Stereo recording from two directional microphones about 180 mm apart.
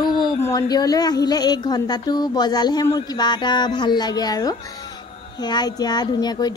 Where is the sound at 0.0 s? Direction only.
25° left (ahead or behind).